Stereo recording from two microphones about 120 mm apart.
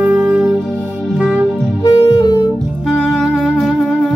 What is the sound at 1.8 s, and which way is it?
Music, 45° left (ahead or behind).